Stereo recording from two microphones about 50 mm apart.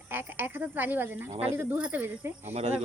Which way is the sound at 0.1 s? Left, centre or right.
Right.